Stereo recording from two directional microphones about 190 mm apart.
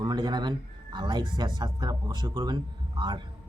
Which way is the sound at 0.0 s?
20° right (ahead or behind).